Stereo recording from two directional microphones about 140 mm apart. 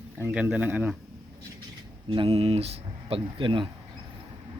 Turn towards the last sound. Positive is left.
turn(degrees=-35)  # may be behind; listen again after turning